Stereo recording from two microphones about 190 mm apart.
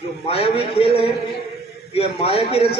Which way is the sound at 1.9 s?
30° left (ahead or behind).